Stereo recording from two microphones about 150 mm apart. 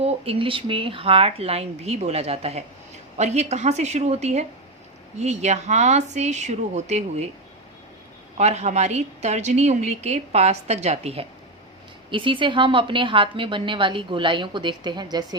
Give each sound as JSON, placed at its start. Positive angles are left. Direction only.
{"t": 0.0, "sound": "a woman's voice", "side_deg": -40}
{"t": 8.4, "sound": "a woman's voice", "side_deg": -50}